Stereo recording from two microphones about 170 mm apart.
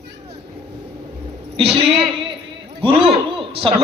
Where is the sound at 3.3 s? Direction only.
30° right (ahead or behind).